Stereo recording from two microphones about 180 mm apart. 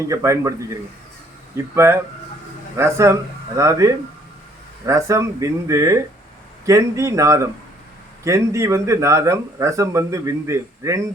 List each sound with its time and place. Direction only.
0.1 s speech: 15° right (ahead or behind)